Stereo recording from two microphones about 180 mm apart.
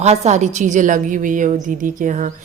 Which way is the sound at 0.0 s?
40° right (ahead or behind).